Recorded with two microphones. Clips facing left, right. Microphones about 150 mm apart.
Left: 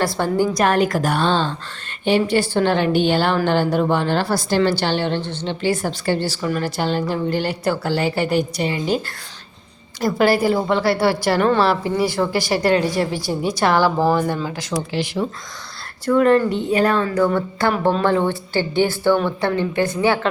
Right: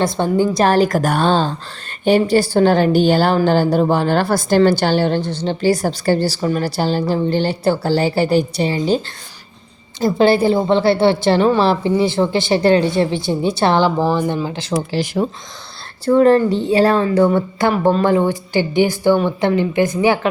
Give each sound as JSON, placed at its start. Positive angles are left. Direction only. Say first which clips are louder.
{"t": 0.0, "sound": "a woman's voice", "louder": "right 3 dB", "side_deg": -20}
{"t": 0.6, "sound": "a woman's voice", "louder": "right 4 dB", "side_deg": -35}
{"t": 10.0, "sound": "a woman's voice", "louder": "right 3 dB", "side_deg": -25}
{"t": 14.2, "sound": "a woman's voice", "louder": "right 2 dB", "side_deg": -15}
{"t": 14.4, "sound": "a woman's voice", "louder": "right 3 dB", "side_deg": -25}
{"t": 14.7, "sound": "a woman's voice", "louder": "right 4 dB", "side_deg": -45}
{"t": 16.0, "sound": "a woman's voice", "louder": "right 3 dB", "side_deg": -30}
{"t": 17.2, "sound": "a woman's voice", "louder": "right 3 dB", "side_deg": -15}